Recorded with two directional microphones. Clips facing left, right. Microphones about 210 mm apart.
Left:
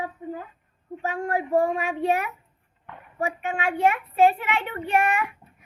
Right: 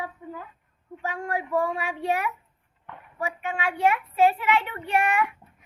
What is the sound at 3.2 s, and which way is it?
A child's voice, 45° left (ahead or behind).